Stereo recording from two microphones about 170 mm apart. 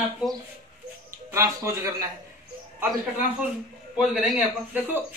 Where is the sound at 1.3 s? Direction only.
15° right (ahead or behind).